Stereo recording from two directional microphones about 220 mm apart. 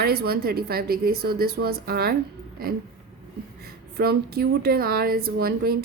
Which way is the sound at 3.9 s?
45° right (ahead or behind).